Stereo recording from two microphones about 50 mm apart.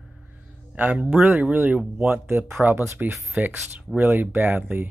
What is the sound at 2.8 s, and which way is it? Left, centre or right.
Speech, right.